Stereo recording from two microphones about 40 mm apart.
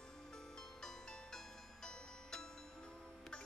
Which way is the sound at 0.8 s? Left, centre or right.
Centre.